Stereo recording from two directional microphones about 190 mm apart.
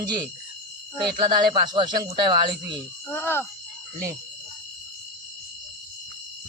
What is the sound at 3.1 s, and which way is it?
Speech, 10° left (ahead or behind).